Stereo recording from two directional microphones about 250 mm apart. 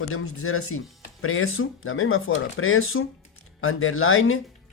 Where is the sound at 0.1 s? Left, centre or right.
Left.